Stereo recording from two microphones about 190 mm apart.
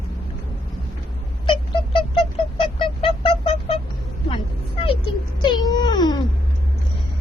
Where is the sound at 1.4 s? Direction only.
25° left (ahead or behind).